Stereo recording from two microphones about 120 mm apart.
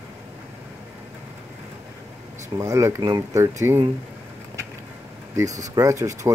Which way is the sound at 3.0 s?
35° right (ahead or behind).